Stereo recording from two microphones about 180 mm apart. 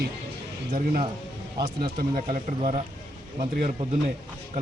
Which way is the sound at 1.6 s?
25° right (ahead or behind).